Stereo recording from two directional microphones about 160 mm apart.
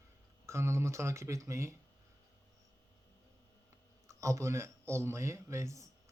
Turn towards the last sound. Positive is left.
turn(degrees=-20)  # may be behind; listen again after turning